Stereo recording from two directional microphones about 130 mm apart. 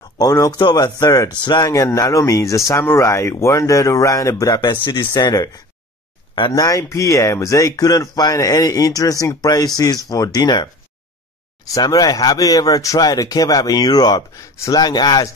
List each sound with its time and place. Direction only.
0.2 s speech: 30° left (ahead or behind)
6.5 s speech: 25° left (ahead or behind)